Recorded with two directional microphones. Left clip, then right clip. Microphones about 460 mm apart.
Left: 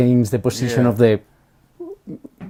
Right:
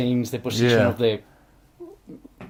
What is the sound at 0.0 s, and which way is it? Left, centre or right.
Speech, left.